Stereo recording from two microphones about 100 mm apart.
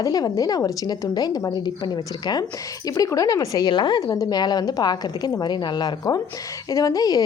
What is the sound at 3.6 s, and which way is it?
Speech, 50° left (ahead or behind).